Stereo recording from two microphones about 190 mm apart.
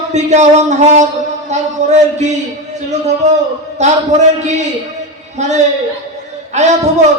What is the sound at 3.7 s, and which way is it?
Speech, 35° right (ahead or behind).